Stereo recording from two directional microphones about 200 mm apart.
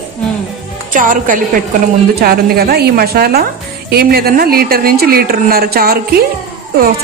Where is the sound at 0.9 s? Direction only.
40° right (ahead or behind).